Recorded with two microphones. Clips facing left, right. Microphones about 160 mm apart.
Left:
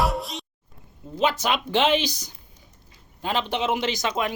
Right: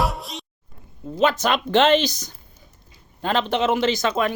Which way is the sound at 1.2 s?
10° left (ahead or behind).